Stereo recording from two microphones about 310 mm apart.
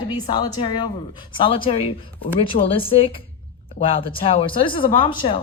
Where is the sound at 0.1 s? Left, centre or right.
Centre.